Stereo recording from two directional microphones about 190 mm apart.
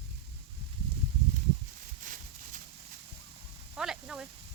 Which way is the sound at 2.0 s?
45° right (ahead or behind).